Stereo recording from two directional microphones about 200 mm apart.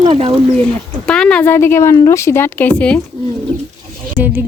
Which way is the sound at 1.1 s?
5° left (ahead or behind).